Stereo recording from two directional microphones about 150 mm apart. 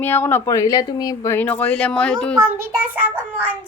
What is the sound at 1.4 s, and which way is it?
Speech, 10° left (ahead or behind).